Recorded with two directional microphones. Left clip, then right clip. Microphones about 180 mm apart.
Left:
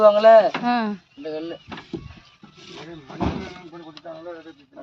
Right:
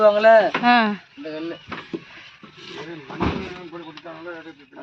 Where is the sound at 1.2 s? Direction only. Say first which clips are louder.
Left 1 dB; 30° left (ahead or behind).